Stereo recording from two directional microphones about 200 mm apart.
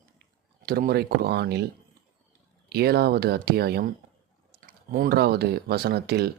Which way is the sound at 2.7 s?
50° right (ahead or behind).